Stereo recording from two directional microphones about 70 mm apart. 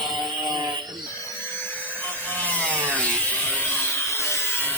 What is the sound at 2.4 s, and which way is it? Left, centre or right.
Wood, left.